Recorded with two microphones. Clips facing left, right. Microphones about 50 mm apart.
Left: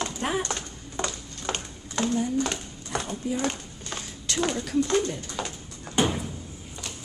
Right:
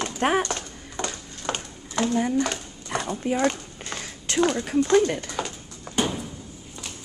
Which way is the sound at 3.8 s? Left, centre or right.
Right.